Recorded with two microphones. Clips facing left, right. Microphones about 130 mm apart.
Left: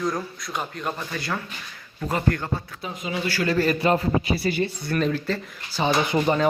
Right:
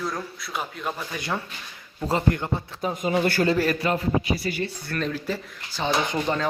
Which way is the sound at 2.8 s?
45° right (ahead or behind).